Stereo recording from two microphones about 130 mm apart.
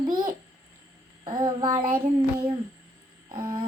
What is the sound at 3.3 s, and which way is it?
Child singing, 40° right (ahead or behind).